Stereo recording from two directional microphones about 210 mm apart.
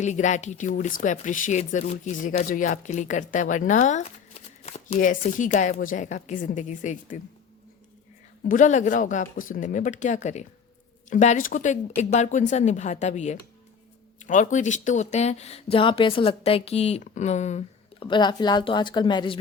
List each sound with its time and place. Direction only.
0.0 s speech: 35° left (ahead or behind)
8.4 s speech: 35° left (ahead or behind)
18.0 s speech: 20° left (ahead or behind)